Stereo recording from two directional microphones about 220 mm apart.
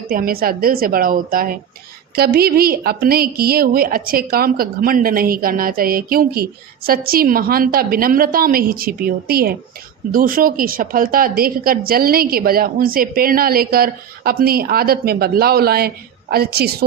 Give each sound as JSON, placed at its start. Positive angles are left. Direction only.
{"t": 0.1, "sound": "a woman's voice", "side_deg": -40}